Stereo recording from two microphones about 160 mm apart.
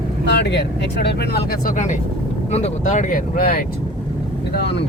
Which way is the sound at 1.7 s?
50° left (ahead or behind).